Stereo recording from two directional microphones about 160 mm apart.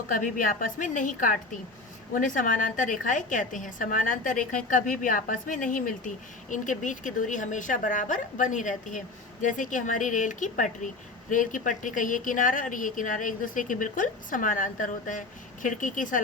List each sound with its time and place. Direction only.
0.1 s a woman's voice: 55° left (ahead or behind)